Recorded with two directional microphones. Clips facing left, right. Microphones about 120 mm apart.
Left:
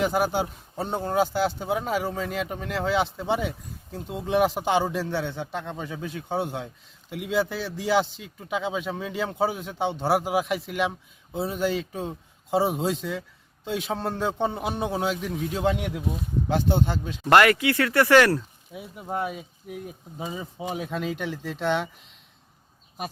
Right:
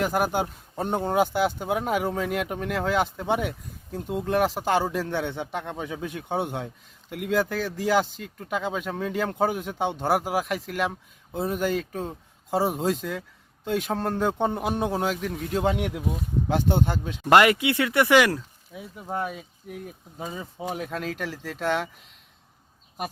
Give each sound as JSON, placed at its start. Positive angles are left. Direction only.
{"t": 0.0, "sound": "speech", "side_deg": -5}
{"t": 1.1, "sound": "speech", "side_deg": -15}
{"t": 1.6, "sound": "speech", "side_deg": 0}
{"t": 5.3, "sound": "speech", "side_deg": -15}
{"t": 10.0, "sound": "speech", "side_deg": 10}
{"t": 15.6, "sound": "speech", "side_deg": -5}
{"t": 18.9, "sound": "speech", "side_deg": 5}